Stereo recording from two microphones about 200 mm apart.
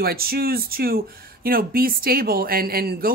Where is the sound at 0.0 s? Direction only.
50° right (ahead or behind).